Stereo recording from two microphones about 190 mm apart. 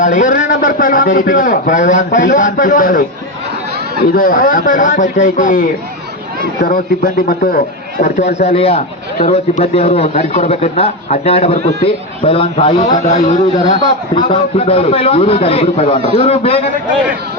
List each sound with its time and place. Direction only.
0.0 s a man's voice: 40° left (ahead or behind)
4.1 s a man's voice: 50° left (ahead or behind)
8.0 s a man's voice: 35° left (ahead or behind)